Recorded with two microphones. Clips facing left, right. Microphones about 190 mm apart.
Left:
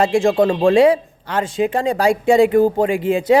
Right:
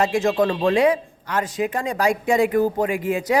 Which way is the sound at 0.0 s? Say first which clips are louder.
Left 4 dB; 30° left (ahead or behind).